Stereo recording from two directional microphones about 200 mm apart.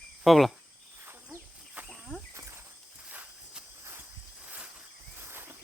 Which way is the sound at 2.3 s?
15° right (ahead or behind).